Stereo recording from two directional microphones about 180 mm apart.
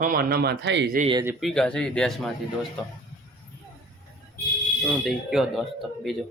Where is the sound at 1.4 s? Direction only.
5° left (ahead or behind).